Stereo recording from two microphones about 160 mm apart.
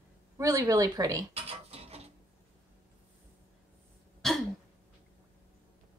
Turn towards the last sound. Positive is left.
turn(degrees=0)  # may be behind; listen again after turning